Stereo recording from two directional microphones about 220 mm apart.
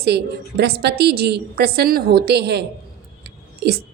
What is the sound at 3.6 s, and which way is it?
Speech, 50° right (ahead or behind).